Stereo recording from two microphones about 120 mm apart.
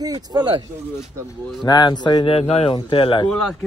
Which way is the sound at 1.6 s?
35° left (ahead or behind).